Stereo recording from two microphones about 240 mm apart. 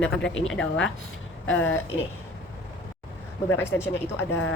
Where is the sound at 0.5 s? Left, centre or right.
Centre.